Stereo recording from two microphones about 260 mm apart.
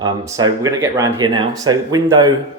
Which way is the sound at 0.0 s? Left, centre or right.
Centre.